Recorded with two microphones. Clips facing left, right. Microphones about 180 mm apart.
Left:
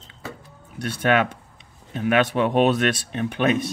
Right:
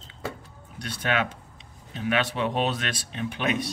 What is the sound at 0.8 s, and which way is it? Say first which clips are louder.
Speech: left 7 dB; 50° left (ahead or behind).